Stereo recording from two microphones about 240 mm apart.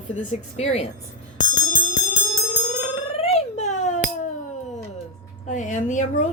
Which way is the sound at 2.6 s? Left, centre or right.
Left.